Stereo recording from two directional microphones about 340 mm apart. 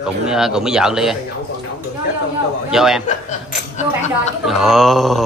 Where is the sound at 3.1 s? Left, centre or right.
Left.